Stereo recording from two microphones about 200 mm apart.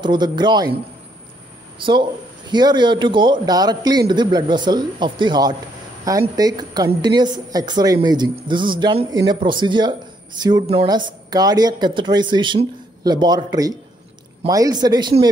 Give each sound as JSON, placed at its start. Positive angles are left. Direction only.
{"t": 0.0, "sound": "a woman's voice", "side_deg": -20}
{"t": 1.8, "sound": "a woman's voice", "side_deg": -25}